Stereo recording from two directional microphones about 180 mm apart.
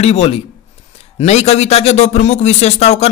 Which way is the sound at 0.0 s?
35° left (ahead or behind).